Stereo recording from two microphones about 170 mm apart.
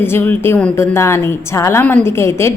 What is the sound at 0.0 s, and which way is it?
Speech, 10° left (ahead or behind).